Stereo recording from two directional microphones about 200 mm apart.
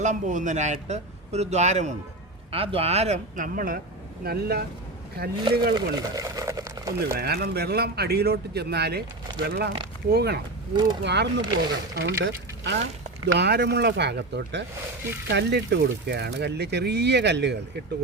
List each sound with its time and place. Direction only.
0.0 s speech: 40° right (ahead or behind)
5.7 s speech: 15° right (ahead or behind)
7.1 s speech: 50° right (ahead or behind)